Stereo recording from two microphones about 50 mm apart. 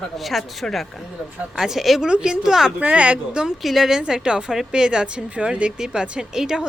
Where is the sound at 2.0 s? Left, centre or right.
Centre.